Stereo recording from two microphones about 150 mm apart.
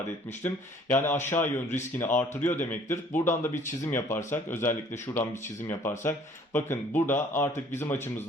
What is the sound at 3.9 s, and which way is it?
A man's voice, 15° left (ahead or behind).